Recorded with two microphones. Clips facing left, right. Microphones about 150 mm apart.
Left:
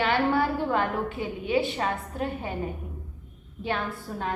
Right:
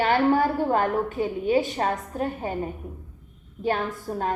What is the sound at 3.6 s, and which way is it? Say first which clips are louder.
Speech: right 4 dB; 40° right (ahead or behind).